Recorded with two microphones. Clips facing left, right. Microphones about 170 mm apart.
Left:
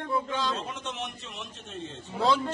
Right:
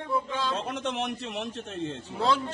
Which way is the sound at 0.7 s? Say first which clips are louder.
Right 6 dB; 70° right (ahead or behind).